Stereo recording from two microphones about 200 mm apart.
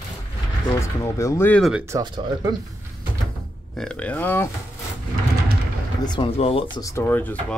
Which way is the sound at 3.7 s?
5° left (ahead or behind).